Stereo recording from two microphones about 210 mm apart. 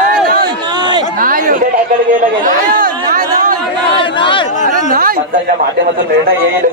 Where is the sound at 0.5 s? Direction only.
20° right (ahead or behind).